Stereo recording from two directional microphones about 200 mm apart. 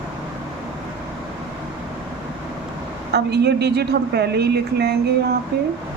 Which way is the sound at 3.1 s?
55° right (ahead or behind).